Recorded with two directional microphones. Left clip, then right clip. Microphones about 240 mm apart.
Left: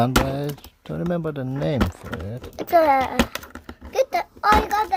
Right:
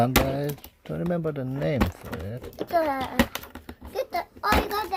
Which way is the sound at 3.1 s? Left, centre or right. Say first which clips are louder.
Left 2 dB; centre.